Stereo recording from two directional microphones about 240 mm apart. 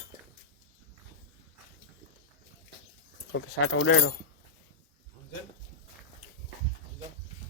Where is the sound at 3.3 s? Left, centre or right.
Left.